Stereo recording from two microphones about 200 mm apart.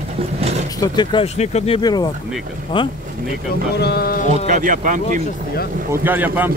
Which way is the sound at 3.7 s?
55° left (ahead or behind).